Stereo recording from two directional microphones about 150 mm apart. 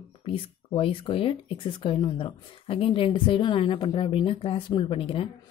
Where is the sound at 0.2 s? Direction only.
35° left (ahead or behind).